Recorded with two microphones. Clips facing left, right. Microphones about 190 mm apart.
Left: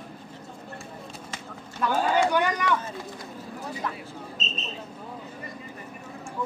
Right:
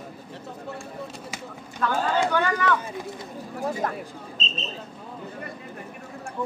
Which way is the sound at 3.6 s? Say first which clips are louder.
Right 7 dB; 50° right (ahead or behind).